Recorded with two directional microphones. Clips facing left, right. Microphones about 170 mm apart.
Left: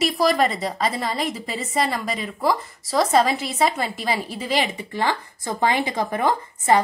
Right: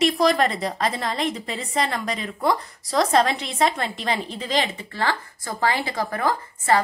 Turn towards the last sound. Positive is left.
turn(degrees=20)  # may be behind; listen again after turning